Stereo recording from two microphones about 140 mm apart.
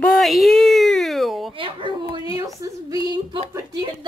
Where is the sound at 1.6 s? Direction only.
40° right (ahead or behind).